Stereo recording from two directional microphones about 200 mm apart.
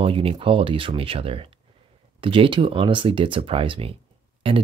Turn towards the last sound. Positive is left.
turn(degrees=-25)  # may be behind; listen again after turning